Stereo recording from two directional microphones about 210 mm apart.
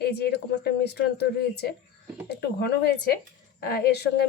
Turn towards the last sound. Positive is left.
turn(degrees=50)  # may be behind; listen again after turning